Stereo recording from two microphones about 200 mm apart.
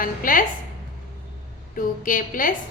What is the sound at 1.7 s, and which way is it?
Speech, 40° left (ahead or behind).